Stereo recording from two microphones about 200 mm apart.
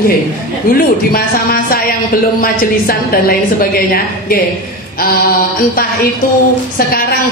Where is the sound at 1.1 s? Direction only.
50° left (ahead or behind).